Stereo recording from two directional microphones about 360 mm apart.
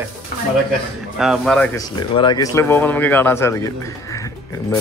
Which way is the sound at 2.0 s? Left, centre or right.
Centre.